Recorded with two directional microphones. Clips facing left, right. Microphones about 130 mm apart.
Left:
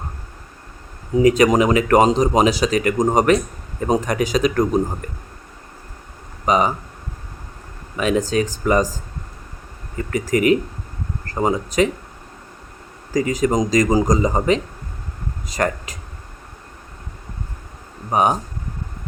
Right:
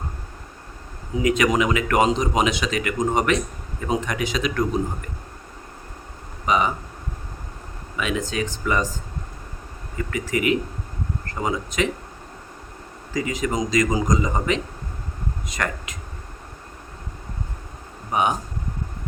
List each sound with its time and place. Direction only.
1.2 s speech: 35° left (ahead or behind)
6.4 s speech: 40° left (ahead or behind)
7.9 s speech: 40° left (ahead or behind)
10.0 s speech: 40° left (ahead or behind)
13.1 s speech: 40° left (ahead or behind)
18.1 s speech: 40° left (ahead or behind)